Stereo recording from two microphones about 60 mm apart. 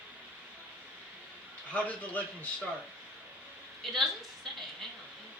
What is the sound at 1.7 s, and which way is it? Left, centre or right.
Speech, left.